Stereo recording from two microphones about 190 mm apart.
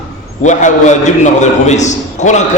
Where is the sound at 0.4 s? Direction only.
40° left (ahead or behind).